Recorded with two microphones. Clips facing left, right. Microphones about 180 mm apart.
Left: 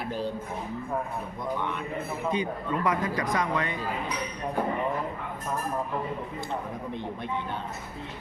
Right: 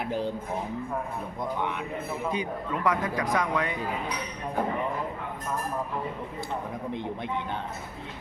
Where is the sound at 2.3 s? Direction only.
5° right (ahead or behind).